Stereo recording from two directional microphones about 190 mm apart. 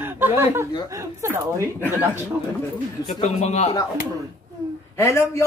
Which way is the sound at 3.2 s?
35° left (ahead or behind).